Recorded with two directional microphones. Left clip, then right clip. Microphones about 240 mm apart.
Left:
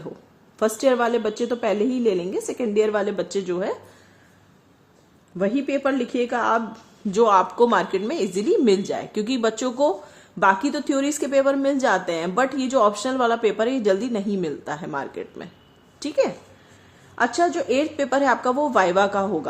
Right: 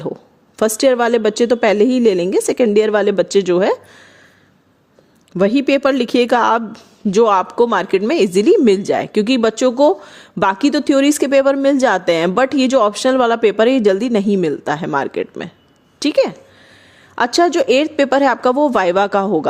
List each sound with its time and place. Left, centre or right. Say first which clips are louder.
0.5 s a woman's voice: right 6 dB; right
5.4 s speech: right 9 dB; right
6.7 s a woman's voice: right 6 dB; right